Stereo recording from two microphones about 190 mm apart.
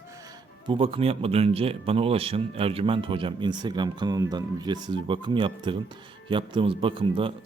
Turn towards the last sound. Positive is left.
turn(degrees=-25)  # may be behind; listen again after turning